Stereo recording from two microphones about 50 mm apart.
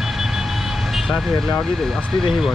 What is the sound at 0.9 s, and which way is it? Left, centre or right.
Speech, centre.